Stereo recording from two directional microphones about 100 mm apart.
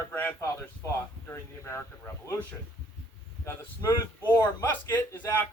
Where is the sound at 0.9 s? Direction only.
30° left (ahead or behind).